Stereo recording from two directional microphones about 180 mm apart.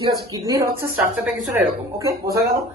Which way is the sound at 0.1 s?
20° right (ahead or behind).